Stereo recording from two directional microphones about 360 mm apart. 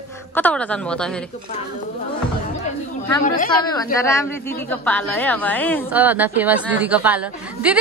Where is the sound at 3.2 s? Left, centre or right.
Left.